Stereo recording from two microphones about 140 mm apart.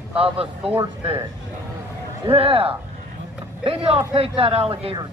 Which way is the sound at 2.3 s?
45° right (ahead or behind).